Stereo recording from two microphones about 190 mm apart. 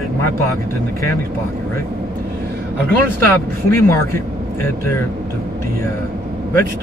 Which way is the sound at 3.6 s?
15° left (ahead or behind).